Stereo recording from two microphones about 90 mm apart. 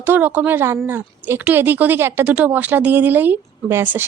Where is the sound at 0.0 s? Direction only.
20° right (ahead or behind).